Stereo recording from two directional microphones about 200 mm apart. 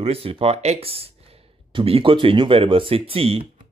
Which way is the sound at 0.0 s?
30° right (ahead or behind).